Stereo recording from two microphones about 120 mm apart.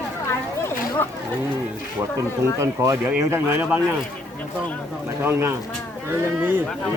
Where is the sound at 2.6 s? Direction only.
20° right (ahead or behind).